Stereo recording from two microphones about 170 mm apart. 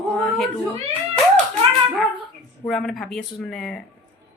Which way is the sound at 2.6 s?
Centre (ahead or behind).